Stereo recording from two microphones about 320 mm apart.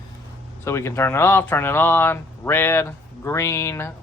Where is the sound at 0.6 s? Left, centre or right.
Centre.